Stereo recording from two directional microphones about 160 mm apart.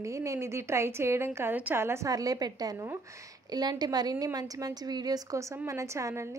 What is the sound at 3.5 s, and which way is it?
A woman's voice, 25° right (ahead or behind).